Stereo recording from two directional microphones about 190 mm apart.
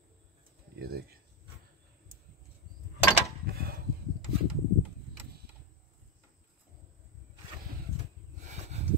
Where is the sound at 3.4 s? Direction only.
55° right (ahead or behind).